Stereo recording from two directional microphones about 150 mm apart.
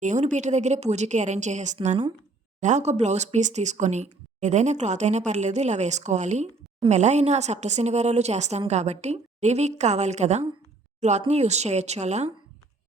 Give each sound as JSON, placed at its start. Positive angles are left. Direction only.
{"t": 0.0, "sound": "speech", "side_deg": -55}